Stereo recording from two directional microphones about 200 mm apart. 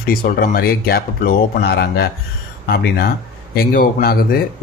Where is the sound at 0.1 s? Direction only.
45° left (ahead or behind).